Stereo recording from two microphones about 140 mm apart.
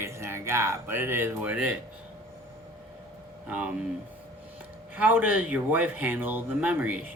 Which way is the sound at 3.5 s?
5° right (ahead or behind).